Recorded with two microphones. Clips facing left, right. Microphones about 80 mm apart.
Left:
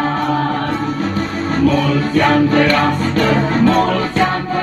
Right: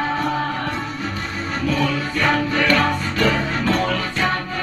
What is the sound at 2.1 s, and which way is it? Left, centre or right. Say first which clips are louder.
Music: left 11 dB; left.